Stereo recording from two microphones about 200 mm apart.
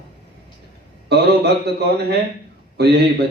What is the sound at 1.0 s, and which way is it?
A man's voice, 55° right (ahead or behind).